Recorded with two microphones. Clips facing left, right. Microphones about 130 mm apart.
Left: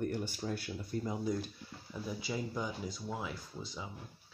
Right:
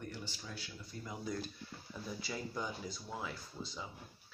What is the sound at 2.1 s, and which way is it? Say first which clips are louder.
Speech: left 4 dB; 10° left (ahead or behind).